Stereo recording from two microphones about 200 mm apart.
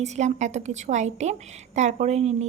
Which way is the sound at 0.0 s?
35° right (ahead or behind).